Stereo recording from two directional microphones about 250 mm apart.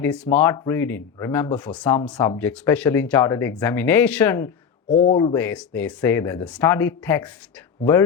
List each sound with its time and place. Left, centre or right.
0.0 s speech: centre
4.9 s speech: left
5.3 s speech: centre